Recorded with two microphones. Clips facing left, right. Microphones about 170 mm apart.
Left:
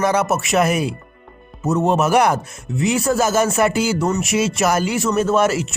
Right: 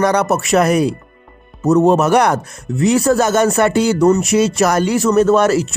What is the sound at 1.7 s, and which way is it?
Speech, centre (ahead or behind).